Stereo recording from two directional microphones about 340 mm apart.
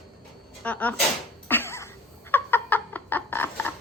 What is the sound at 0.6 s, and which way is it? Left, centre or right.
Speech, centre.